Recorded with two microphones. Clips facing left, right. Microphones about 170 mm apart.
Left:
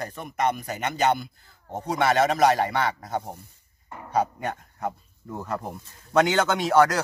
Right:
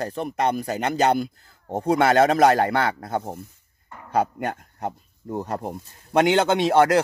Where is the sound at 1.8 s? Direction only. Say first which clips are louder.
Right 4 dB; 55° right (ahead or behind).